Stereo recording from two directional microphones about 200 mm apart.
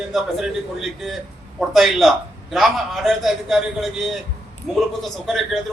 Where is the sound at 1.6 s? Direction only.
Centre (ahead or behind).